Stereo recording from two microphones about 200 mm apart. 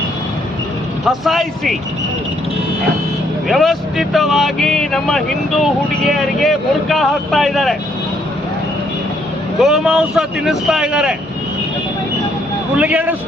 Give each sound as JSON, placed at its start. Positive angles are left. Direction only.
{"t": 1.0, "sound": "speech", "side_deg": 0}
{"t": 3.5, "sound": "speech", "side_deg": 0}
{"t": 9.6, "sound": "speech", "side_deg": 0}
{"t": 12.7, "sound": "speech", "side_deg": -5}